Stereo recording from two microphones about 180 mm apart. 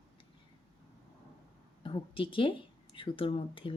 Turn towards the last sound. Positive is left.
turn(degrees=30)  # may be behind; listen again after turning